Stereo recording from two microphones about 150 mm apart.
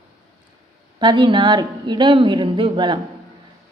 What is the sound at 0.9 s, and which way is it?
A woman's voice, 35° right (ahead or behind).